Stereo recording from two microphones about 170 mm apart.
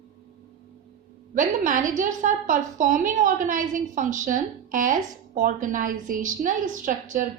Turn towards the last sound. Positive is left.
turn(degrees=-50)  # may be behind; listen again after turning